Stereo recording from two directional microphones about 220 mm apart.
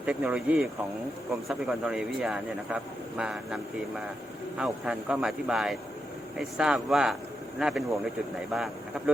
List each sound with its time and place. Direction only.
0.0 s speech: 5° right (ahead or behind)